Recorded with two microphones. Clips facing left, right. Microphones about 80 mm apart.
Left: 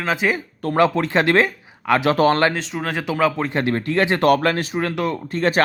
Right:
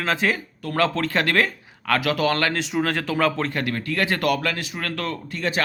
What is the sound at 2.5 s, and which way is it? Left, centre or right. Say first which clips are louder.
Speech: right 1 dB; centre.